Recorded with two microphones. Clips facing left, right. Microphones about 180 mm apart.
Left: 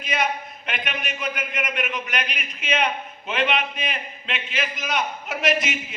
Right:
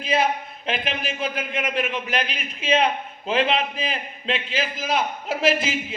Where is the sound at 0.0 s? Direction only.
30° right (ahead or behind).